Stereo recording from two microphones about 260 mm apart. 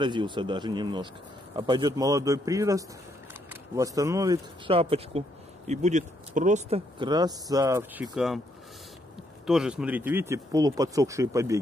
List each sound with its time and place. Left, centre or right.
0.0 s speech: centre
9.5 s speech: centre